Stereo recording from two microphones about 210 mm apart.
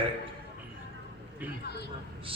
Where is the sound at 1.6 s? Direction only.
50° left (ahead or behind).